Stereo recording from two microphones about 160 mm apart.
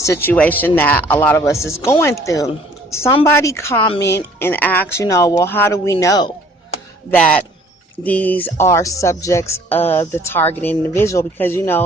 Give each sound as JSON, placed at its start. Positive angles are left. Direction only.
{"t": 0.0, "sound": "speech", "side_deg": 15}
{"t": 7.1, "sound": "speech", "side_deg": 10}